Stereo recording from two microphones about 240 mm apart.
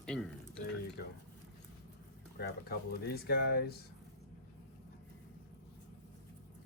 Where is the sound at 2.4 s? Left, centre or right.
Left.